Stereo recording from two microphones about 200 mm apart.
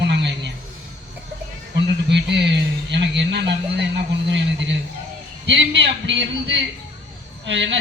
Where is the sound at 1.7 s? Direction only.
60° right (ahead or behind).